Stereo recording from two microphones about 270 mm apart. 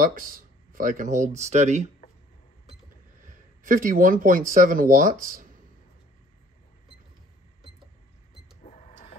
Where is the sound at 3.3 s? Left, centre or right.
Right.